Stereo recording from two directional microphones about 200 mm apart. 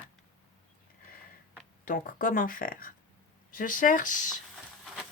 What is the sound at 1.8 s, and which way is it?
Speech, 45° left (ahead or behind).